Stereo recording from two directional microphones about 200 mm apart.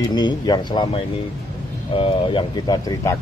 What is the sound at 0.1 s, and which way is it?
A man's voice, 20° left (ahead or behind).